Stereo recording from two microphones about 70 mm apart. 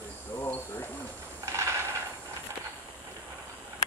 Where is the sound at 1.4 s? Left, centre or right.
Right.